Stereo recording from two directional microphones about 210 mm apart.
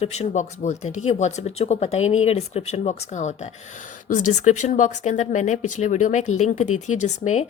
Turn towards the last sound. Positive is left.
turn(degrees=35)  # may be behind; listen again after turning